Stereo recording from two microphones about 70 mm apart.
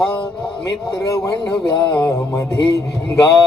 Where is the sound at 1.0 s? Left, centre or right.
Left.